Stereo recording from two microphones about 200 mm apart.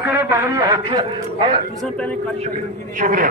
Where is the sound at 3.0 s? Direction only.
40° right (ahead or behind).